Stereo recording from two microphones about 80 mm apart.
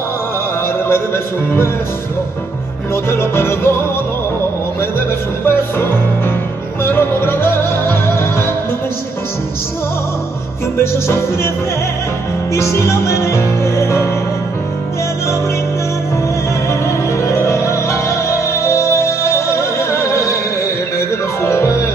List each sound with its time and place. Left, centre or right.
0.8 s music: left
2.9 s music: left
5.4 s music: left
10.8 s music: left
12.5 s music: left
16.6 s music: left
21.4 s music: left